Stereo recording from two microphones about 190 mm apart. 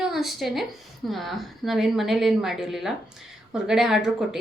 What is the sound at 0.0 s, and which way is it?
A woman's voice, centre (ahead or behind).